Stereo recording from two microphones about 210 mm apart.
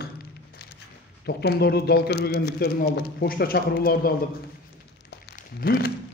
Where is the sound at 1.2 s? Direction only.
50° left (ahead or behind).